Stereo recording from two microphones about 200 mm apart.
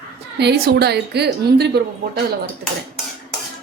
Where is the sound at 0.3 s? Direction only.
55° right (ahead or behind).